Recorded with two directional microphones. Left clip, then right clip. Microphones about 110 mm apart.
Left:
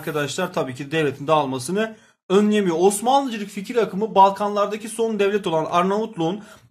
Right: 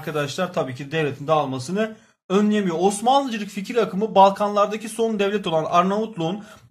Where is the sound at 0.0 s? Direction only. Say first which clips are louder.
Left 1 dB; 20° left (ahead or behind); by 5.1 s centre (ahead or behind).